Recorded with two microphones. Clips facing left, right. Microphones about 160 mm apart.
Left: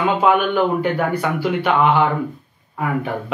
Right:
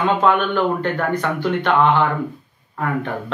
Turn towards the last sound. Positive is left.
turn(degrees=10)  # may be behind; listen again after turning